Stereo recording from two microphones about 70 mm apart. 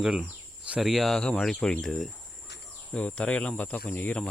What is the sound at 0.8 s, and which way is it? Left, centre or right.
Speech, centre.